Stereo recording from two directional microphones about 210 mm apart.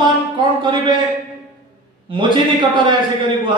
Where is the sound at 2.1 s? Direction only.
25° right (ahead or behind).